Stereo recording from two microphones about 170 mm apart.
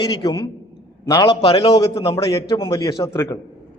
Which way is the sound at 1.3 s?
35° left (ahead or behind).